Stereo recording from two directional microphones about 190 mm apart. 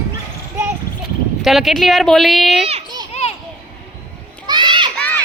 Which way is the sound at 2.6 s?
25° right (ahead or behind).